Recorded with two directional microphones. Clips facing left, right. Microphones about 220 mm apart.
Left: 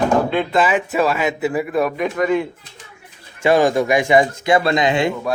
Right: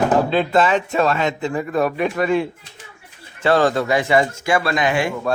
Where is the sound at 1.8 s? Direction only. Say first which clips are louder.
Even; 30° right (ahead or behind).